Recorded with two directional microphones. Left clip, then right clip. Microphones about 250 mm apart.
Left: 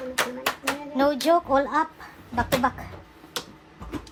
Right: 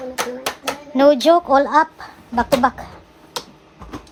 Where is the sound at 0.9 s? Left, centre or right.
Right.